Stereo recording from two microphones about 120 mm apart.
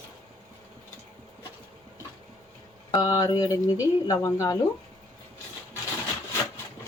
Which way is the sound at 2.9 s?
35° left (ahead or behind).